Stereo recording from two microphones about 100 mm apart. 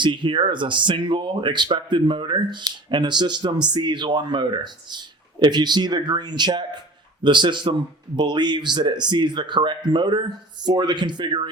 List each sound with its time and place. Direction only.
0.0 s speech: 55° right (ahead or behind)